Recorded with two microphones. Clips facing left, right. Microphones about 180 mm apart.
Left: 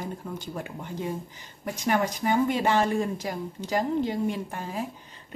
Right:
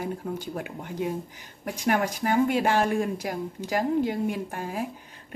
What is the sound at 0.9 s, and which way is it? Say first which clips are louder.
Speech: right 3 dB; 10° right (ahead or behind).